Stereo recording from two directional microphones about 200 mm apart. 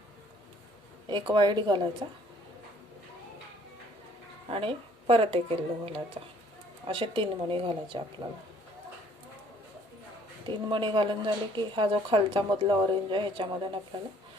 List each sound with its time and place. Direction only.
1.0 s speech: 25° right (ahead or behind)
4.4 s speech: 25° right (ahead or behind)
10.4 s speech: 25° right (ahead or behind)